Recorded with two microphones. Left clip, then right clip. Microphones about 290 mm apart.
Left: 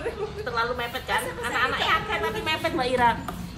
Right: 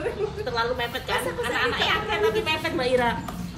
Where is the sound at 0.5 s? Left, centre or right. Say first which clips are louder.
Even; centre.